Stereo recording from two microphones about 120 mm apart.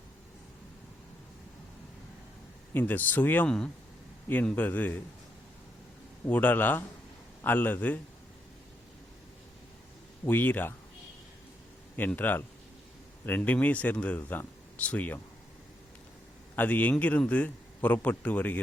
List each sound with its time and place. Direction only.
2.7 s a man's voice: 15° left (ahead or behind)
6.2 s a man's voice: 15° left (ahead or behind)
10.2 s a man's voice: 15° left (ahead or behind)
11.9 s a man's voice: 15° left (ahead or behind)
16.6 s a man's voice: 15° left (ahead or behind)